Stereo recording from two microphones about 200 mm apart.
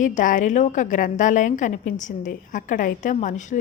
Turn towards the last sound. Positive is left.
turn(degrees=40)  # may be behind; listen again after turning